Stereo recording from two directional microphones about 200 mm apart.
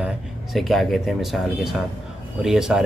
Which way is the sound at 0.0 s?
Centre (ahead or behind).